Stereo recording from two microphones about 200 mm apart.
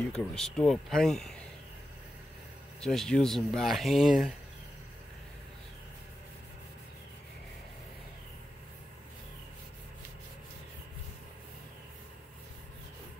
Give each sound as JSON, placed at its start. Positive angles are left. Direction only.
{"t": 0.1, "sound": "speech", "side_deg": 5}
{"t": 2.8, "sound": "speech", "side_deg": 0}